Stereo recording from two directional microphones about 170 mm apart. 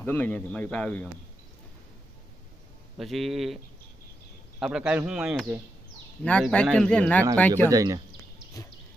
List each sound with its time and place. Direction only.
0.0 s a man's voice: 10° left (ahead or behind)
3.0 s a man's voice: centre (ahead or behind)
4.6 s a man's voice: 5° right (ahead or behind)
6.2 s a man's voice: 5° left (ahead or behind)
7.6 s speech: 20° right (ahead or behind)